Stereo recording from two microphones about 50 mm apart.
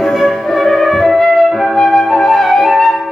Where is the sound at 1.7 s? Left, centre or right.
Centre.